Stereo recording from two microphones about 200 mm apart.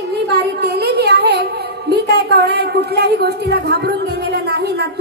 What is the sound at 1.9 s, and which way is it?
A woman's voice, 55° right (ahead or behind).